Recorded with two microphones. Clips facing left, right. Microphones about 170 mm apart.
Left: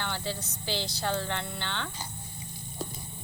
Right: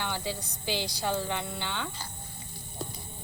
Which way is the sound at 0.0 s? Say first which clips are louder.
Right 1 dB; 10° right (ahead or behind).